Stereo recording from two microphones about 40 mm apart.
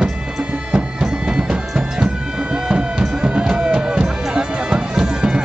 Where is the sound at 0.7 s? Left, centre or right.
Centre.